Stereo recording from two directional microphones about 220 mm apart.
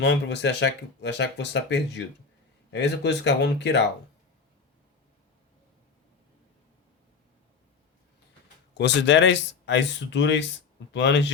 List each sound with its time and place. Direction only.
0.0 s speech: 50° left (ahead or behind)
8.7 s speech: 50° left (ahead or behind)